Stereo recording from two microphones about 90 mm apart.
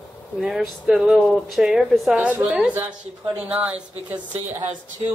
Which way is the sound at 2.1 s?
15° right (ahead or behind).